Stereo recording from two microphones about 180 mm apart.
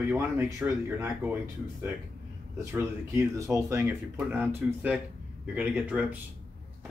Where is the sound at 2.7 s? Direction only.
15° right (ahead or behind).